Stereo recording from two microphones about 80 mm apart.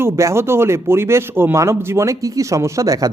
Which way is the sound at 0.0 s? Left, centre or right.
Right.